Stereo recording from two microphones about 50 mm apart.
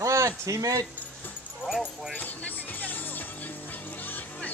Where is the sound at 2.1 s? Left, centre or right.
Left.